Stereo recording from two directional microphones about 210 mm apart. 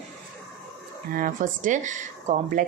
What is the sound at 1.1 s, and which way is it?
Speech, 40° right (ahead or behind).